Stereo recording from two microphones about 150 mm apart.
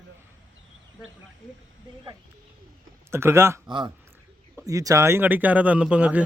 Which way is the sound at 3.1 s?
15° right (ahead or behind).